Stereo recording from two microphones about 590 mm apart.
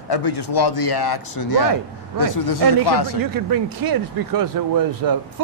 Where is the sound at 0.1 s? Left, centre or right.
Left.